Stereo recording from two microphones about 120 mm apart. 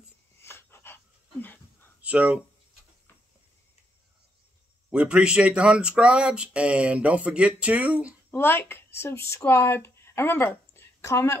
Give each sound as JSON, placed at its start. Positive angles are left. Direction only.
{"t": 0.4, "sound": "dog", "side_deg": 20}
{"t": 2.0, "sound": "speech", "side_deg": -10}
{"t": 4.9, "sound": "speech", "side_deg": -10}
{"t": 8.3, "sound": "speech", "side_deg": 20}